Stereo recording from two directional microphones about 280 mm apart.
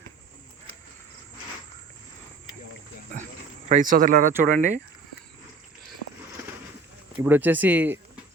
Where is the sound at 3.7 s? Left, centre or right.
Right.